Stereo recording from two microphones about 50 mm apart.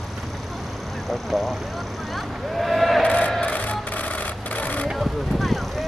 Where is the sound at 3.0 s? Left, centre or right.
Left.